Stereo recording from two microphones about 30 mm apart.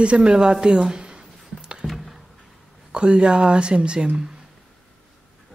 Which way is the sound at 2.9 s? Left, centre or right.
Right.